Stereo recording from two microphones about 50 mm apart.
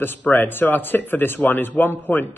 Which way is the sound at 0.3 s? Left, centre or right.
Left.